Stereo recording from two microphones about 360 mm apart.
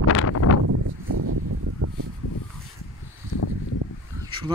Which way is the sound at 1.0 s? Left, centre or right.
Right.